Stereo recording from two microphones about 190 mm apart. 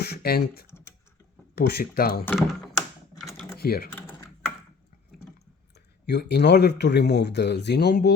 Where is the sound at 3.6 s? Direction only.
55° left (ahead or behind).